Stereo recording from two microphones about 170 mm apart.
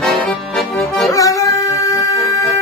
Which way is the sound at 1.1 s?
20° left (ahead or behind).